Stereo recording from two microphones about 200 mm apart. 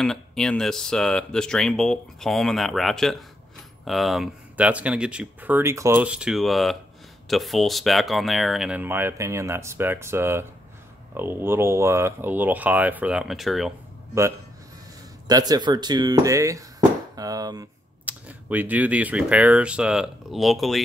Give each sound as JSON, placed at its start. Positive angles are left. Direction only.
{"t": 0.0, "sound": "speech", "side_deg": 5}
{"t": 15.2, "sound": "speech", "side_deg": -20}
{"t": 17.1, "sound": "chop", "side_deg": -20}
{"t": 18.0, "sound": "speech", "side_deg": -10}